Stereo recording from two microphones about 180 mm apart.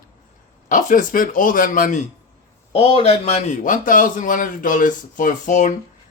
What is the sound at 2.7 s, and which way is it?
A man's voice, 30° left (ahead or behind).